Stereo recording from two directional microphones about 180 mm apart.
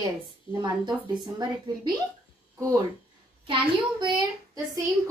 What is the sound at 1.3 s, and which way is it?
Speech, 25° right (ahead or behind).